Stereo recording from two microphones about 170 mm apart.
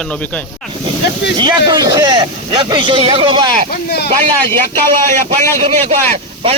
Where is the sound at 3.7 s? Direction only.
70° left (ahead or behind).